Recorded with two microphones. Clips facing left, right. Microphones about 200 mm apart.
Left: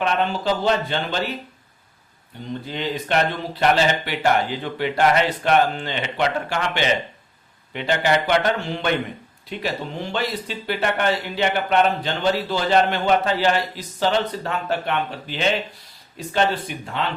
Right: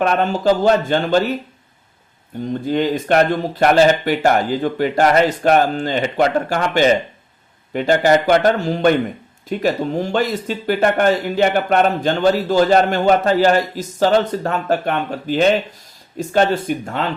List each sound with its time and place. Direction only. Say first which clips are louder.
0.0 s speech: right 6 dB; 45° right (ahead or behind)
2.5 s speech: right 9 dB; 45° right (ahead or behind)